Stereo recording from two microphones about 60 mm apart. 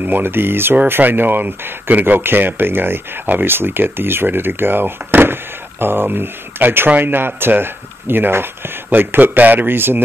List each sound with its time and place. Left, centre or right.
0.0 s speech: right